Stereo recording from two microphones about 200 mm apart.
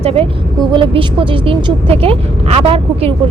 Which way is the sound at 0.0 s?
30° right (ahead or behind).